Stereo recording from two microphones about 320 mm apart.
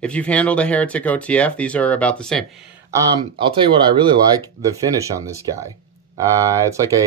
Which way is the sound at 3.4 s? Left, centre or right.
Centre.